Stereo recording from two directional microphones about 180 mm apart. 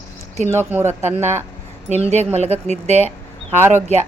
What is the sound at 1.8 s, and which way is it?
A woman's voice, 40° right (ahead or behind).